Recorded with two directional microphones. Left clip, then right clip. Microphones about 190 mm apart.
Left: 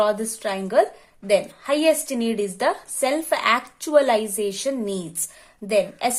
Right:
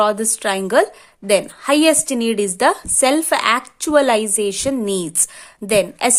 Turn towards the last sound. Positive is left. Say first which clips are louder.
# right 5 dB
turn(degrees=-35)  # may be behind; listen again after turning